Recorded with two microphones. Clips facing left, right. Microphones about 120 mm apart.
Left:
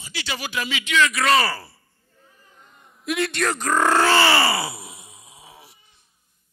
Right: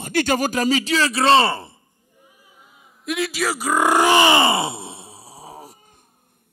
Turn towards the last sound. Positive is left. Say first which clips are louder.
# right 9 dB
turn(degrees=-40)  # may be behind; listen again after turning